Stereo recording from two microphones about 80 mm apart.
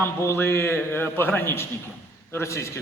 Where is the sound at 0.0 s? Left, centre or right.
Left.